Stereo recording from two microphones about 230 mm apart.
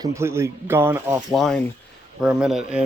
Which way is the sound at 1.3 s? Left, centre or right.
Centre.